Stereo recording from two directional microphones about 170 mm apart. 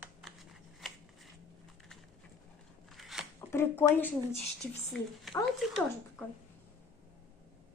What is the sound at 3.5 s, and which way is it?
Speech, 15° left (ahead or behind).